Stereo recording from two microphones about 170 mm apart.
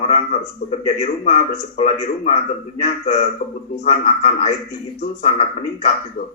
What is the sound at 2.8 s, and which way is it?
A man's voice, 40° left (ahead or behind).